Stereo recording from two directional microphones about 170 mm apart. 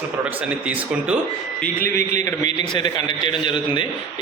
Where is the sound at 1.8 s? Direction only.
50° right (ahead or behind).